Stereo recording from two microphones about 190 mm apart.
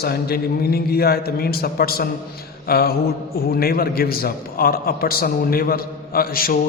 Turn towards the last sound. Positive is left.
turn(degrees=50)  # may be behind; listen again after turning